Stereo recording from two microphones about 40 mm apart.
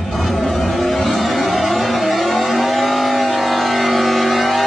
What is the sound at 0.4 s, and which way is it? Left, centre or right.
Music, centre.